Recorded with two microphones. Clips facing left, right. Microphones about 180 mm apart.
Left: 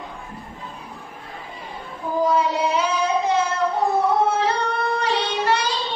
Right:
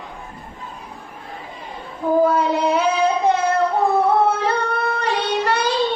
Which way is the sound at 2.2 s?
55° right (ahead or behind).